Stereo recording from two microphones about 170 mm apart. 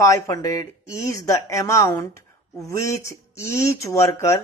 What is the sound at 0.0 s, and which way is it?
Speech, 20° left (ahead or behind).